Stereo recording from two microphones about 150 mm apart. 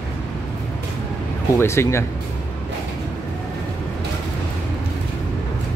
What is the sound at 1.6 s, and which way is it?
Speech, 15° left (ahead or behind).